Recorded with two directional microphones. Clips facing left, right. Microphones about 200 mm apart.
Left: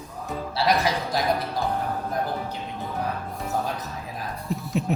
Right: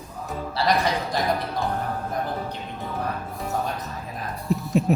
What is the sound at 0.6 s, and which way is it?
Speech, centre (ahead or behind).